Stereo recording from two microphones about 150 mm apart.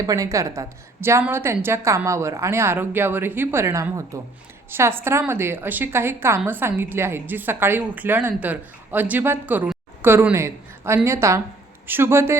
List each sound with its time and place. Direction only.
0.0 s a woman's voice: 25° right (ahead or behind)